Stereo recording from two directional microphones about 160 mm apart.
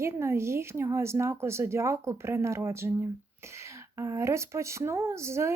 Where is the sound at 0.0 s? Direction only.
15° right (ahead or behind).